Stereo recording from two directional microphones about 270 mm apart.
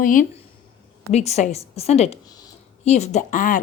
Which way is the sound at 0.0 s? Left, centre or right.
Left.